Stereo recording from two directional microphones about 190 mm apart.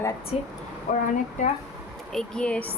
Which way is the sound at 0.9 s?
45° left (ahead or behind).